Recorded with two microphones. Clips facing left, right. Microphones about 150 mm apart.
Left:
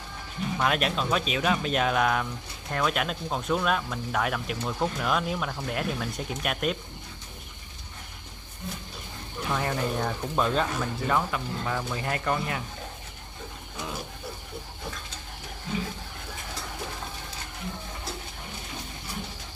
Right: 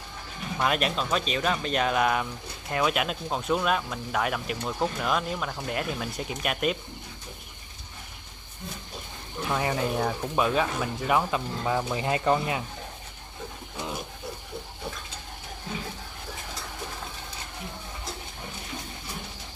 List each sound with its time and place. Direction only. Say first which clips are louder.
0.6 s speech: right 1 dB; centre (ahead or behind)
9.5 s speech: right 1 dB; 5° right (ahead or behind)
13.7 s pigeon: right 1 dB; 20° right (ahead or behind)